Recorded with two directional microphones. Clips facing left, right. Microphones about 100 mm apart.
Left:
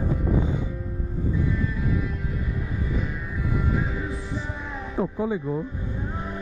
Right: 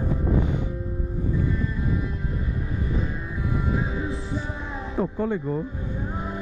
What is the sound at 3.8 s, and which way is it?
Music, 20° right (ahead or behind).